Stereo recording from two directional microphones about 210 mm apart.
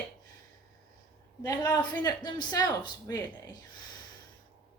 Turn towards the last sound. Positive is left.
turn(degrees=15)  # may be behind; listen again after turning